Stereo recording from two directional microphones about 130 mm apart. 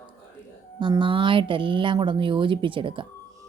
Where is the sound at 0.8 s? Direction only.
35° right (ahead or behind).